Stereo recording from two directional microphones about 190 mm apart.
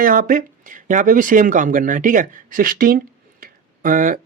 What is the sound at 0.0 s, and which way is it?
Speech, 45° right (ahead or behind).